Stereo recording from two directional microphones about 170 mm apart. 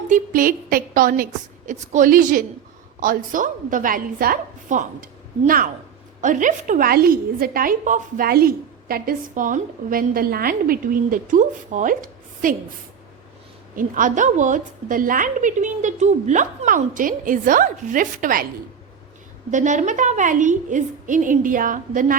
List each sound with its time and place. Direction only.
0.1 s a woman's voice: 55° right (ahead or behind)
13.7 s a woman's voice: 50° right (ahead or behind)
19.5 s a woman's voice: 45° right (ahead or behind)